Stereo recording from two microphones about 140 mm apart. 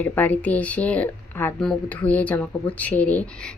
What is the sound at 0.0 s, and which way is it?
Speech, 10° left (ahead or behind).